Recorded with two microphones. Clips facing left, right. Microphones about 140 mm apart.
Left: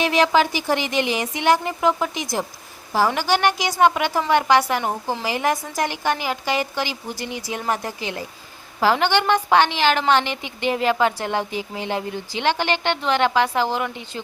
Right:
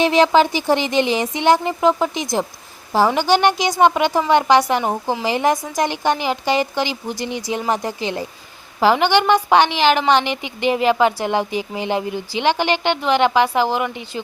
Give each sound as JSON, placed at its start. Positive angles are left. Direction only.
{"t": 0.0, "sound": "speech", "side_deg": -25}
{"t": 8.8, "sound": "a woman's voice", "side_deg": -15}